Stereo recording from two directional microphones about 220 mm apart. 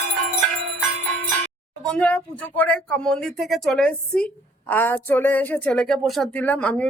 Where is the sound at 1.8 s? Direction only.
5° left (ahead or behind).